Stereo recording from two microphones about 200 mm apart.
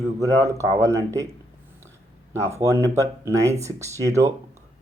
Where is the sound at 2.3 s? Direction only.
15° right (ahead or behind).